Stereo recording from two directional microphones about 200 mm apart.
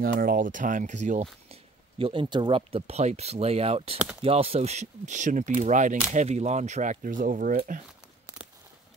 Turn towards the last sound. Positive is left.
turn(degrees=-40)  # may be behind; listen again after turning